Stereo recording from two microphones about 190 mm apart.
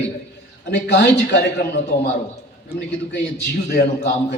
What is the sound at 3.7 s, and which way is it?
Speech, 60° left (ahead or behind).